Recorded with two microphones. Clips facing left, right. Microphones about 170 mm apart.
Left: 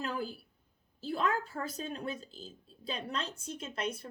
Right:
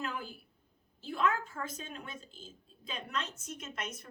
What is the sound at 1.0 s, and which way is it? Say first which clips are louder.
A woman's voice: even; 35° left (ahead or behind).